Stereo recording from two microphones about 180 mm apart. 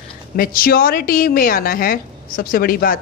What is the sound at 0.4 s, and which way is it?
A woman's voice, 55° left (ahead or behind).